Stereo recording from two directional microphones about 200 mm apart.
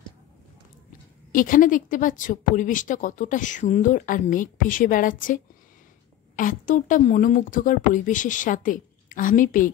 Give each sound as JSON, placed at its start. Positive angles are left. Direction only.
{"t": 1.3, "sound": "speech", "side_deg": 40}